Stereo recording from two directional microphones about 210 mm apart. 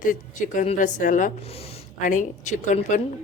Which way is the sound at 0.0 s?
40° left (ahead or behind).